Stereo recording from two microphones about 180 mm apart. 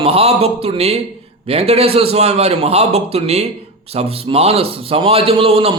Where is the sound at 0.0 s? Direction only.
35° right (ahead or behind).